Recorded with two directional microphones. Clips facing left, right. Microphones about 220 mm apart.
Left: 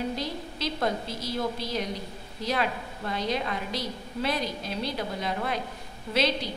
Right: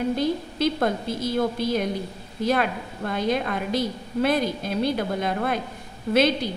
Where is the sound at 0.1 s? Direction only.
50° right (ahead or behind).